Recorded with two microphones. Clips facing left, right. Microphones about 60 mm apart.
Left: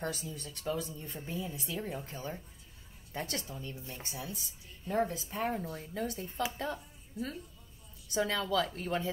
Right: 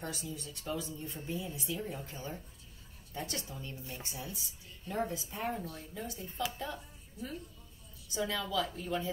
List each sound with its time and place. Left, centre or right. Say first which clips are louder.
0.4 s a woman's voice: left 5 dB; left
3.2 s a woman's voice: left 2 dB; left
3.4 s speech: left 1 dB; centre
4.0 s a woman's voice: left 1 dB; left
5.9 s a woman's voice: left 4 dB; left